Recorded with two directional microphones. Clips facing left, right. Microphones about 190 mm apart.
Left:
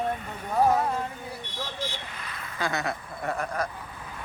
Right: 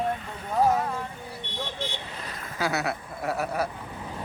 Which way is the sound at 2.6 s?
5° right (ahead or behind).